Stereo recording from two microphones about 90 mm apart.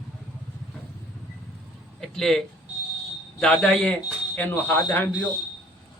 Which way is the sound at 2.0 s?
5° left (ahead or behind).